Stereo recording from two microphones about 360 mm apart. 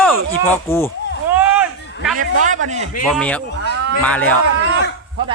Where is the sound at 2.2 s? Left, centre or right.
Right.